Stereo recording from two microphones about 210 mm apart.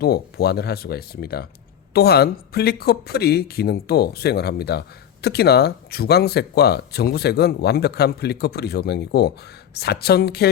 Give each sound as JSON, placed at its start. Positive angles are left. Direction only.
{"t": 0.0, "sound": "speech", "side_deg": 50}